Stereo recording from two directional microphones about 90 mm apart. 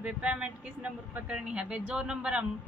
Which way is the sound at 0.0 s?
15° right (ahead or behind).